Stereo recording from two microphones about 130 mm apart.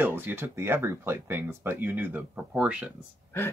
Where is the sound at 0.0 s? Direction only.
15° right (ahead or behind).